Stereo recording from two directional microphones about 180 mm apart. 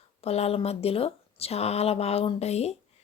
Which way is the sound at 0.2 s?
35° left (ahead or behind).